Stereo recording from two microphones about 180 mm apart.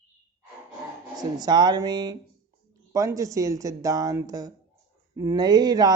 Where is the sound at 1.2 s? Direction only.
20° right (ahead or behind).